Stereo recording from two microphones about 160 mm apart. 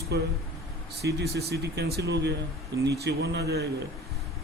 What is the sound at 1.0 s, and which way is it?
Speech, 90° right.